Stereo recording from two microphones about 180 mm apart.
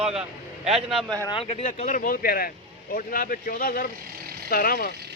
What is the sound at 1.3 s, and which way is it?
Speech, 30° left (ahead or behind).